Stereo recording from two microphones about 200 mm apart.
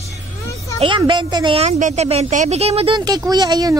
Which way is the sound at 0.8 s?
25° right (ahead or behind).